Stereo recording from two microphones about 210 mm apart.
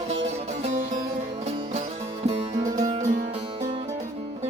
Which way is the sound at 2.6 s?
15° right (ahead or behind).